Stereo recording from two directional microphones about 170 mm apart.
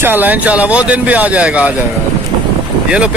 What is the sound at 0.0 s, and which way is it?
A woman's voice, 10° right (ahead or behind).